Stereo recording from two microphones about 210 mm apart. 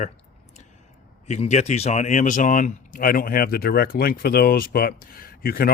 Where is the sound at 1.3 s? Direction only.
35° left (ahead or behind).